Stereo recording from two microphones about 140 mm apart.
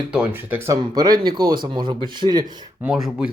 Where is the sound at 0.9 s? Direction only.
30° right (ahead or behind).